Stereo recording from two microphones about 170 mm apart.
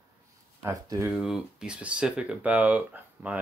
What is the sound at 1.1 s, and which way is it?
Speech, 5° right (ahead or behind).